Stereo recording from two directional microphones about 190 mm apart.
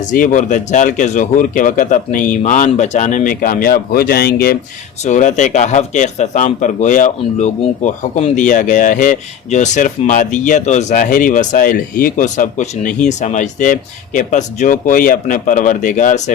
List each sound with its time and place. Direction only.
0.0 s speech: 40° left (ahead or behind)
5.0 s a man's voice: 40° left (ahead or behind)